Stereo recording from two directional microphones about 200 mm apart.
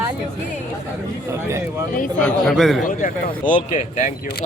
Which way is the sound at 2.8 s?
45° left (ahead or behind).